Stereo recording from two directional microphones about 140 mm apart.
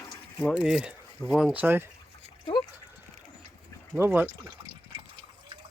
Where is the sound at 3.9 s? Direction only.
15° right (ahead or behind).